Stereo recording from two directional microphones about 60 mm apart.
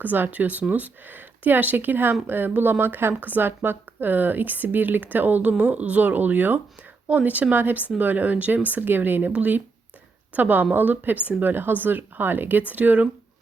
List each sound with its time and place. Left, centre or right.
0.0 s speech: right